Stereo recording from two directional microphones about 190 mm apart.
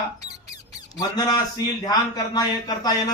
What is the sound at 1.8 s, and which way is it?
A man's voice, 20° left (ahead or behind).